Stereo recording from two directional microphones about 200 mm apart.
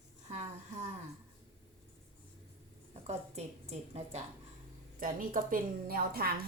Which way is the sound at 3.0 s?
30° right (ahead or behind).